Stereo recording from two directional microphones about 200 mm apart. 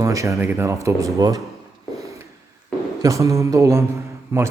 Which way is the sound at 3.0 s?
15° right (ahead or behind).